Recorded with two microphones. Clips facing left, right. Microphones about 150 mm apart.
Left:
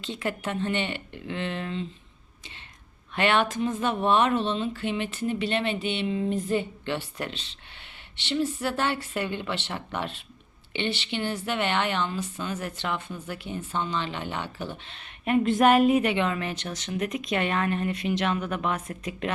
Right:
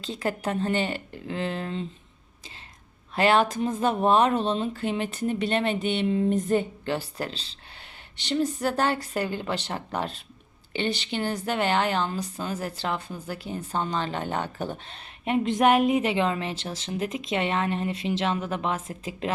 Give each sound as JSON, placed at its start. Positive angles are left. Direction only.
{"t": 0.0, "sound": "speech", "side_deg": -35}
{"t": 3.2, "sound": "speech", "side_deg": -35}
{"t": 15.2, "sound": "speech", "side_deg": -20}
{"t": 16.1, "sound": "speech", "side_deg": -30}